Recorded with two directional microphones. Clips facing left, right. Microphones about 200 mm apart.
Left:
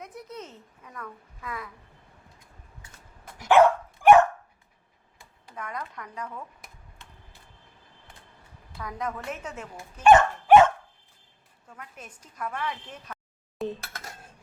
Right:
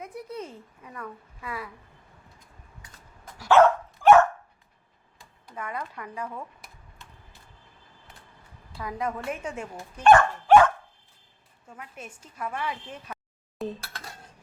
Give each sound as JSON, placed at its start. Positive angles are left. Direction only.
{"t": 0.0, "sound": "a child's voice", "side_deg": -10}
{"t": 3.3, "sound": "dog", "side_deg": 15}
{"t": 5.5, "sound": "a child's voice", "side_deg": -5}
{"t": 8.8, "sound": "a child's voice", "side_deg": -10}
{"t": 10.1, "sound": "speech", "side_deg": 20}
{"t": 11.6, "sound": "a child's voice", "side_deg": -10}
{"t": 13.6, "sound": "dishes", "side_deg": 0}